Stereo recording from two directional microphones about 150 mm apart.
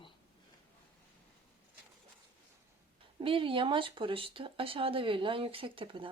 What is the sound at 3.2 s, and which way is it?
Speech, 35° right (ahead or behind).